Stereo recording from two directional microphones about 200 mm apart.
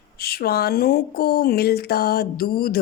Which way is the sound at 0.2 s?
50° left (ahead or behind).